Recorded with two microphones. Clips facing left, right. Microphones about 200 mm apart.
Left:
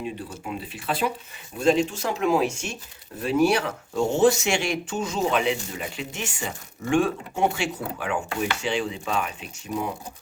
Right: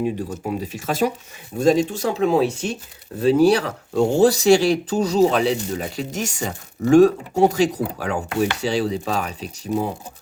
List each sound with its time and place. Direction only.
0.0 s speech: 45° right (ahead or behind)